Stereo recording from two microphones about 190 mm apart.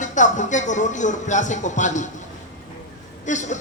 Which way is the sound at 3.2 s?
40° left (ahead or behind).